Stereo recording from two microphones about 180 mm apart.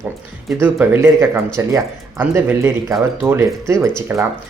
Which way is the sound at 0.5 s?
10° right (ahead or behind).